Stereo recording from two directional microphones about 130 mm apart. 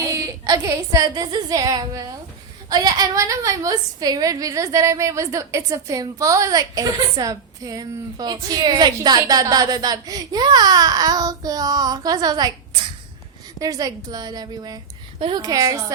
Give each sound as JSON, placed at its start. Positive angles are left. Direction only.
{"t": 0.0, "sound": "a woman's voice", "side_deg": -25}